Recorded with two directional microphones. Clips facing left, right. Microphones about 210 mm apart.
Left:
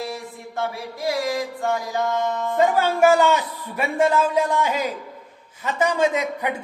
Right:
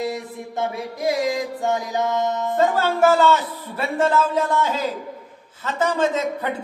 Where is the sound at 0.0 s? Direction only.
20° right (ahead or behind).